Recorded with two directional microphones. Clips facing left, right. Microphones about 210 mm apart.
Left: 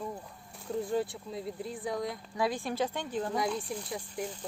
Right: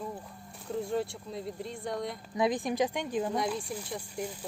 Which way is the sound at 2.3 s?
20° right (ahead or behind).